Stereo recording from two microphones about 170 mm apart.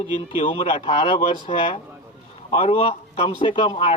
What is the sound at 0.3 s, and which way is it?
A man's voice, 30° left (ahead or behind).